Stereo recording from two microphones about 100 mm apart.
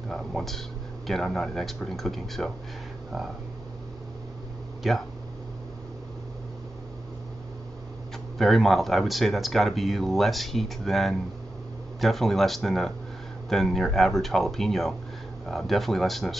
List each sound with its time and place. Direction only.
0.1 s speech: 5° left (ahead or behind)
4.8 s speech: centre (ahead or behind)
8.4 s speech: centre (ahead or behind)